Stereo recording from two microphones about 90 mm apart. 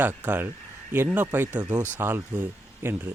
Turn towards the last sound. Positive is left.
turn(degrees=-25)  # may be behind; listen again after turning